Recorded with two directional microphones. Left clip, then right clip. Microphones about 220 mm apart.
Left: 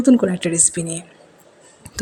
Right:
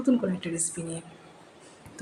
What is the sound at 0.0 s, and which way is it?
A woman's voice, 35° left (ahead or behind).